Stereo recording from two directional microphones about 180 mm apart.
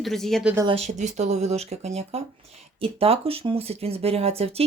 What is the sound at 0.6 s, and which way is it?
A woman's voice, 35° right (ahead or behind).